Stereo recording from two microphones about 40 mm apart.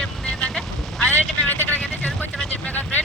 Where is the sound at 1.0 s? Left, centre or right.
Left.